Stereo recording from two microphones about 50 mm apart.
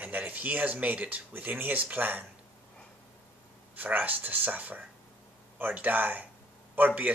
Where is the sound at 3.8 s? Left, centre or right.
Right.